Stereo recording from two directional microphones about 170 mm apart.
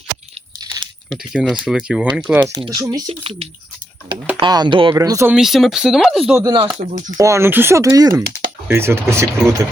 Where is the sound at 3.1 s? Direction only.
35° right (ahead or behind); by 5.3 s 20° right (ahead or behind).